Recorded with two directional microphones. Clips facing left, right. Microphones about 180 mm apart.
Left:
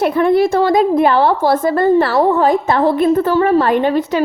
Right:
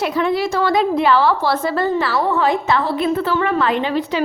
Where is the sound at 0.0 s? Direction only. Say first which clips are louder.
Left 6 dB; 55° left (ahead or behind).